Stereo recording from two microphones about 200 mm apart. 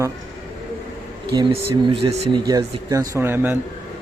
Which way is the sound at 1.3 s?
25° right (ahead or behind).